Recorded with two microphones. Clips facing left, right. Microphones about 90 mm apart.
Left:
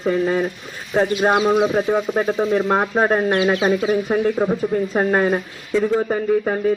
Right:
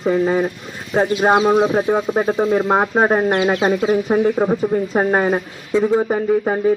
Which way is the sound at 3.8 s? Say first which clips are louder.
Right 3 dB; 15° right (ahead or behind).